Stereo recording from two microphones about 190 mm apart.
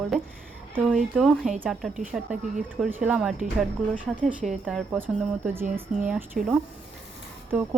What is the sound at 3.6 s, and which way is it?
Speech, 5° left (ahead or behind).